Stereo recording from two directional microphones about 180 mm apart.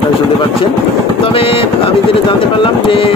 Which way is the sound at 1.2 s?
30° left (ahead or behind).